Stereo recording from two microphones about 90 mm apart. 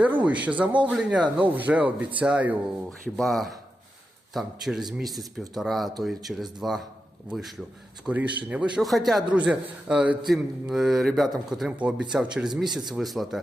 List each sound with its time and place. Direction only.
0.0 s speech: 15° right (ahead or behind)
3.2 s speech: centre (ahead or behind)
8.8 s speech: centre (ahead or behind)
9.3 s speech: 10° right (ahead or behind)
11.8 s speech: 10° right (ahead or behind)